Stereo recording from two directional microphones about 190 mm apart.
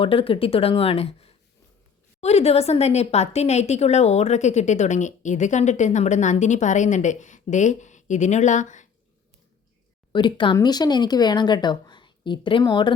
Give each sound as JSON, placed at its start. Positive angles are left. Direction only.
{"t": 0.0, "sound": "speech", "side_deg": 30}
{"t": 10.1, "sound": "speech", "side_deg": 25}